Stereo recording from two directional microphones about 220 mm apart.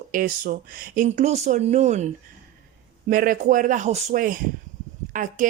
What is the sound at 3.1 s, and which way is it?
Speech, 40° right (ahead or behind).